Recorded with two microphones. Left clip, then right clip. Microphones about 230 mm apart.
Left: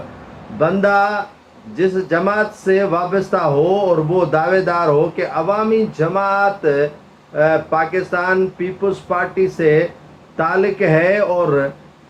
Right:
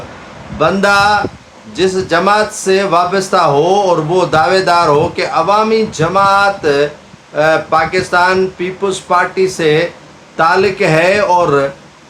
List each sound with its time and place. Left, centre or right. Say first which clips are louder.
0.6 s speech: right 4 dB; right